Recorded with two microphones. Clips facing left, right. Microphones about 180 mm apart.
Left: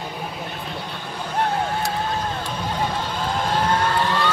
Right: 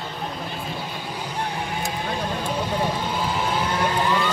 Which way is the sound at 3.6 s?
65° left (ahead or behind).